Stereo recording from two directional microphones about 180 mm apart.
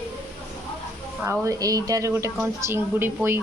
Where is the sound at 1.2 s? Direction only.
15° right (ahead or behind).